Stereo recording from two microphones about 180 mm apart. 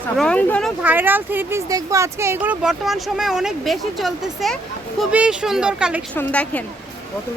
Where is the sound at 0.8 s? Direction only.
10° right (ahead or behind).